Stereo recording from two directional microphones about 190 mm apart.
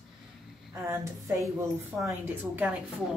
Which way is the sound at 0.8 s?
15° right (ahead or behind).